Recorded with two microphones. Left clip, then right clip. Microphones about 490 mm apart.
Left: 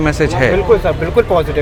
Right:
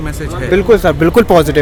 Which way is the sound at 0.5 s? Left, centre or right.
Right.